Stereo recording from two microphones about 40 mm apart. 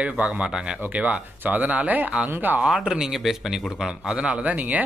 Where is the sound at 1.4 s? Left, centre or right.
Right.